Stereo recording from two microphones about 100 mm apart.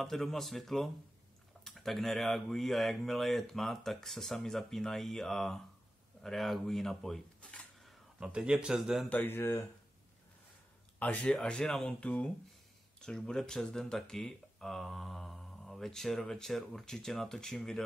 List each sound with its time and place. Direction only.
0.0 s speech: 5° left (ahead or behind)
8.2 s speech: 10° right (ahead or behind)
9.1 s speech: 20° left (ahead or behind)
11.0 s speech: 15° left (ahead or behind)